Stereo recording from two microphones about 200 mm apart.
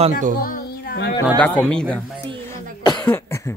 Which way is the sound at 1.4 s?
5° left (ahead or behind).